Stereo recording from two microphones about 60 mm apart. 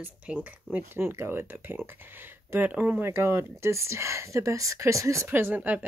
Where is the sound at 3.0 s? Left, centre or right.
Right.